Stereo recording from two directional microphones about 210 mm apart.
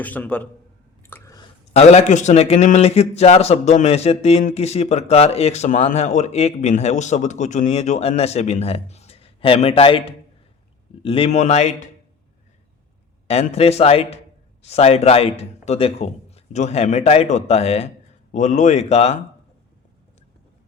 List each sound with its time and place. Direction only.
0.0 s a man's voice: 5° left (ahead or behind)
1.0 s drip: 15° left (ahead or behind)
1.7 s a man's voice: 30° left (ahead or behind)
13.2 s a man's voice: 30° left (ahead or behind)